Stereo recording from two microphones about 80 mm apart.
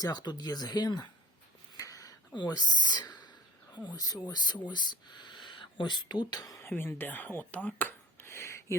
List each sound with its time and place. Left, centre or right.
0.0 s speech: left
1.7 s a sound: left
2.3 s speech: left
3.8 s speech: left
6.6 s speech: left